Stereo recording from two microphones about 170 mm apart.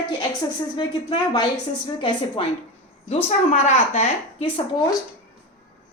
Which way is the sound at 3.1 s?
40° left (ahead or behind).